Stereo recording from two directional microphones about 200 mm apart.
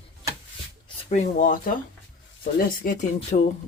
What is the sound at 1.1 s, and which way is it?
Speech, 40° left (ahead or behind).